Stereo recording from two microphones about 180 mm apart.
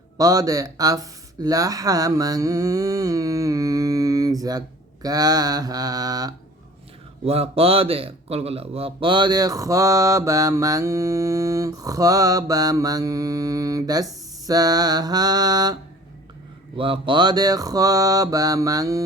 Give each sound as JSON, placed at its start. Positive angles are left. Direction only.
{"t": 0.2, "sound": "speech", "side_deg": -20}
{"t": 7.3, "sound": "speech", "side_deg": -35}